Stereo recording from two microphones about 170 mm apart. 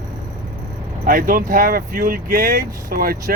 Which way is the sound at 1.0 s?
55° right (ahead or behind).